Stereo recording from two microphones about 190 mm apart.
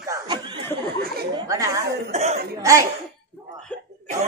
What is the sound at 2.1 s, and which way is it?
Speech, 35° right (ahead or behind).